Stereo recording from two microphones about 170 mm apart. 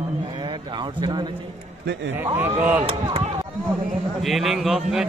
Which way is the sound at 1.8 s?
90° right.